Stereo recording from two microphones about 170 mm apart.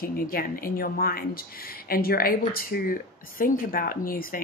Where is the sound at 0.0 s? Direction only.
60° left (ahead or behind).